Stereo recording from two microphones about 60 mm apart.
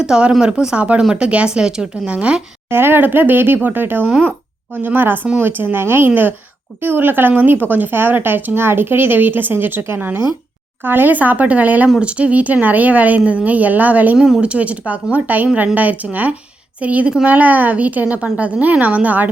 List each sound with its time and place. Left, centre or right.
0.0 s speech: centre
2.6 s speech: right
4.1 s speech: right
4.7 s speech: right
14.2 s speech: centre
14.4 s speech: right